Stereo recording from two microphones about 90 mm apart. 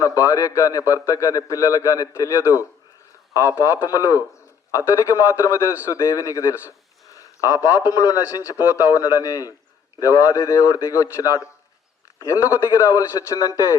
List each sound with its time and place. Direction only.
0.0 s a man's voice: 35° left (ahead or behind)